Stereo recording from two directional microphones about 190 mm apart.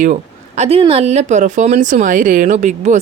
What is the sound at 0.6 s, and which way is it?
Speech, 30° right (ahead or behind).